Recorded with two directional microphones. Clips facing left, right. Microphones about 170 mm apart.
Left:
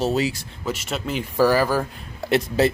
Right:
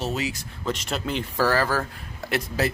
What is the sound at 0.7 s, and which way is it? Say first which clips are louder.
Speech: left 1 dB; 5° left (ahead or behind).